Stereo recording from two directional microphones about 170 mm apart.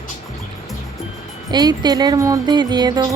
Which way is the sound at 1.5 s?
25° right (ahead or behind).